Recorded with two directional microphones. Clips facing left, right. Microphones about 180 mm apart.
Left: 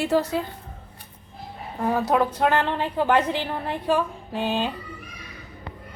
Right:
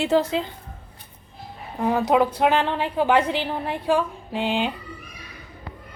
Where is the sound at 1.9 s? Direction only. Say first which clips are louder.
Right 2 dB; 15° right (ahead or behind).